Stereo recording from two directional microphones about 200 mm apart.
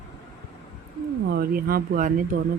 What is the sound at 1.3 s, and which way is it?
Speech, 50° right (ahead or behind).